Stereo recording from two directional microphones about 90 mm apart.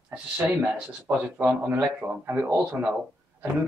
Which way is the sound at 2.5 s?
10° right (ahead or behind).